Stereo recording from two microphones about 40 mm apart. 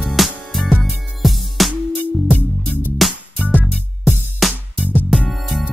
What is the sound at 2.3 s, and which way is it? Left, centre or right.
Music, left.